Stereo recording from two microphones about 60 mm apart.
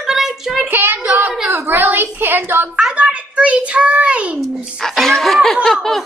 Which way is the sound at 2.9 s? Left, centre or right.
Centre.